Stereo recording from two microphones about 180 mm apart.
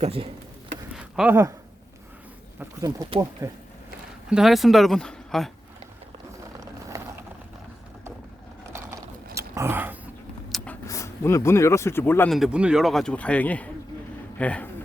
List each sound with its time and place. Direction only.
0.0 s speech: 30° right (ahead or behind)
0.9 s a sound: 5° right (ahead or behind)
3.4 s speech: 15° right (ahead or behind)
4.3 s a man's voice: centre (ahead or behind)
6.9 s vehicle: 20° right (ahead or behind)
8.7 s a sound: 15° right (ahead or behind)
10.8 s speech: 15° left (ahead or behind)
12.3 s a man's voice: 5° right (ahead or behind)